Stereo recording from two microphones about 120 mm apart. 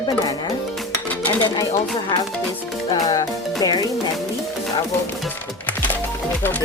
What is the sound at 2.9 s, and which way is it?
Speech, 30° left (ahead or behind).